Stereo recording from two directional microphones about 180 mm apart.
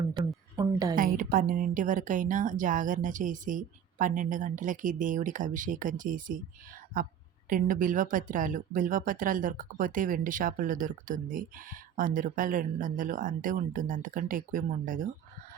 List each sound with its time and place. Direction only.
0.6 s a woman's voice: 20° right (ahead or behind)
0.9 s speech: 50° right (ahead or behind)
7.5 s speech: 50° right (ahead or behind)